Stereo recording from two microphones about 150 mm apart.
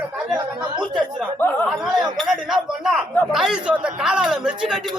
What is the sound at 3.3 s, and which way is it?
Speech, 5° right (ahead or behind).